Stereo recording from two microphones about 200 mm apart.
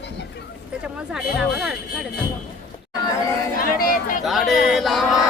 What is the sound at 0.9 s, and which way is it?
Speech, 5° right (ahead or behind).